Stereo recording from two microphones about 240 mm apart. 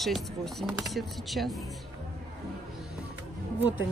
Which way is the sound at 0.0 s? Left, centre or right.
Centre.